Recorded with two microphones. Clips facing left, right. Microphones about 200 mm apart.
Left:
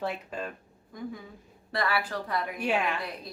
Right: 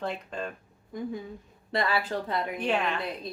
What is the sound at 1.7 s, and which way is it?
Speech, 25° right (ahead or behind).